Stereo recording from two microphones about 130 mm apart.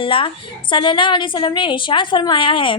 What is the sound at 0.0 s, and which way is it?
A woman's voice, 40° left (ahead or behind).